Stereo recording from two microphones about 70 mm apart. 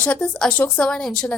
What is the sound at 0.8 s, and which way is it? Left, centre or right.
Speech, centre.